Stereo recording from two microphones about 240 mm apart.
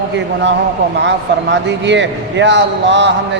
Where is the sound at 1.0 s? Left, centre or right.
Right.